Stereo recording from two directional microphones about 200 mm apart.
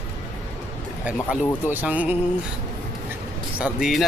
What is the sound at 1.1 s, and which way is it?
Speech, 5° right (ahead or behind).